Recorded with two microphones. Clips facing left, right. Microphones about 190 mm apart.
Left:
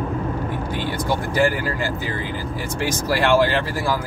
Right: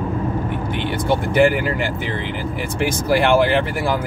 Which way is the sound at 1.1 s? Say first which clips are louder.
Right 5 dB; 20° right (ahead or behind).